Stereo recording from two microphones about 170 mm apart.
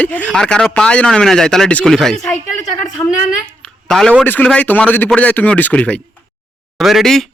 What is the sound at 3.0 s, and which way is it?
Speech, 15° left (ahead or behind).